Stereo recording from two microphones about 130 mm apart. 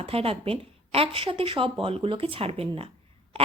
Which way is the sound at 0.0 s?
50° right (ahead or behind).